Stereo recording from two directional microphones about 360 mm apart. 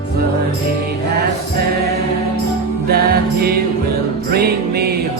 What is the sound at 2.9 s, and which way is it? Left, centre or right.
Music, right.